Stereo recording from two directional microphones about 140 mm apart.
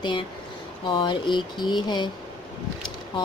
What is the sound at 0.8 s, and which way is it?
Speech, 35° left (ahead or behind).